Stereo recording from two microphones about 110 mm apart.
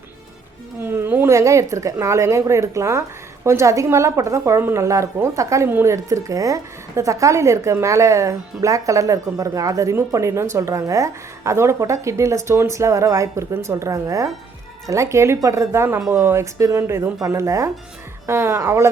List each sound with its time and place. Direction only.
0.8 s a woman's voice: 20° right (ahead or behind)